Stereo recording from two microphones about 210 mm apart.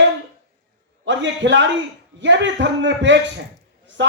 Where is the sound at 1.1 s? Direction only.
60° right (ahead or behind).